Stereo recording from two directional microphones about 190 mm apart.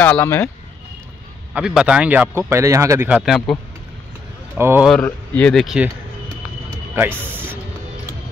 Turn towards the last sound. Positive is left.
turn(degrees=-10)  # may be behind; listen again after turning